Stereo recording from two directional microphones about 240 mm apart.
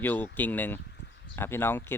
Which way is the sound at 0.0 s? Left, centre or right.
Centre.